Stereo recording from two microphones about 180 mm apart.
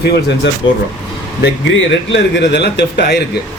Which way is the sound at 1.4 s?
90° left.